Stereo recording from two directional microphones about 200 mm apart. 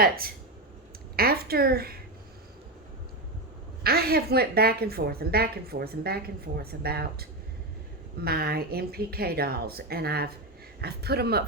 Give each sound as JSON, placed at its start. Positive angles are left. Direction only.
{"t": 1.1, "sound": "a woman's voice", "side_deg": -50}
{"t": 3.8, "sound": "a woman's voice", "side_deg": -50}